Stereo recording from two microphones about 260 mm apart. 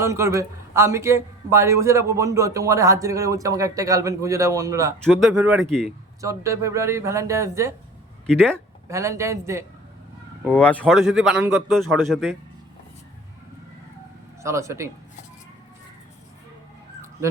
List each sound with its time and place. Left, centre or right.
0.0 s speech: centre
5.0 s speech: centre
6.2 s speech: centre
8.3 s speech: centre
8.9 s speech: centre
10.4 s speech: centre
14.4 s speech: centre